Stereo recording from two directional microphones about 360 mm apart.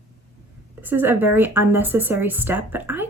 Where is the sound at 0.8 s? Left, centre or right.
Centre.